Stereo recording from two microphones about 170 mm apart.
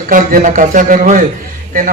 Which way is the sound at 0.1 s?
55° right (ahead or behind).